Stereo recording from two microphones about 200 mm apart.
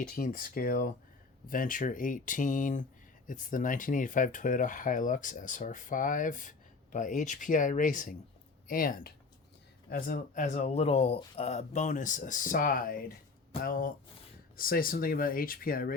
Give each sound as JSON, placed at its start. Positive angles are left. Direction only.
{"t": 0.1, "sound": "speech", "side_deg": 45}